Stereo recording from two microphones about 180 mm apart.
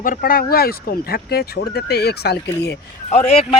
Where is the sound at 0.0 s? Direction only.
50° left (ahead or behind).